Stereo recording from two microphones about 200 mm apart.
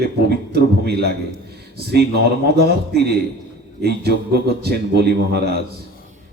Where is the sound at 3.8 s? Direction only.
55° right (ahead or behind).